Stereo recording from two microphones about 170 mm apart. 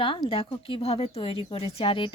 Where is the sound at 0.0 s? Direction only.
30° left (ahead or behind).